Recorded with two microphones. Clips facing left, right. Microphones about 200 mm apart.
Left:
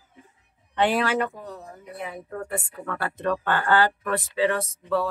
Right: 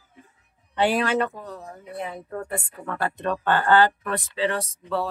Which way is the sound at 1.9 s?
30° right (ahead or behind).